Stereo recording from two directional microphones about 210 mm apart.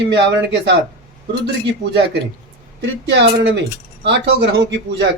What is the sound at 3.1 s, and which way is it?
Speech, 55° right (ahead or behind).